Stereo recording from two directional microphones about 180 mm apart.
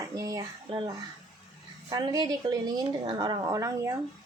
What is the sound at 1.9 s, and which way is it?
A woman's voice, 20° right (ahead or behind).